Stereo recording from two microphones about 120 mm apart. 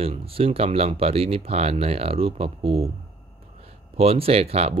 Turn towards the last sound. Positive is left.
turn(degrees=-60)  # may be behind; listen again after turning